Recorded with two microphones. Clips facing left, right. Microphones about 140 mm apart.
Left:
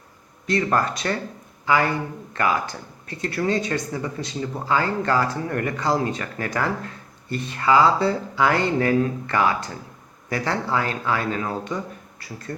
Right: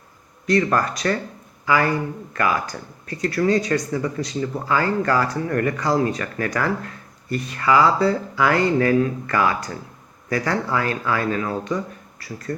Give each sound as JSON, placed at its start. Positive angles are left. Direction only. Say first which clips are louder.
{"t": 0.4, "sound": "speech", "louder": "right 2 dB", "side_deg": 25}